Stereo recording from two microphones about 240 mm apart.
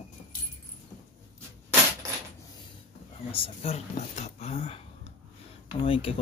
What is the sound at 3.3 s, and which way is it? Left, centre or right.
Speech, left.